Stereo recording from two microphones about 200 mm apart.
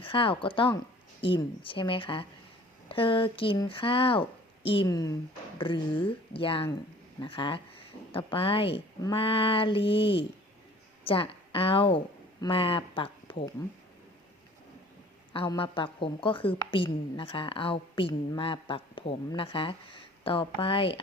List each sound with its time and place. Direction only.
0.0 s a woman's voice: 25° left (ahead or behind)
15.3 s a woman's voice: 25° left (ahead or behind)